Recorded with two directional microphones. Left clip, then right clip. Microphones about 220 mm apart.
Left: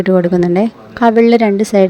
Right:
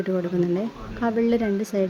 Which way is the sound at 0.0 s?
35° left (ahead or behind).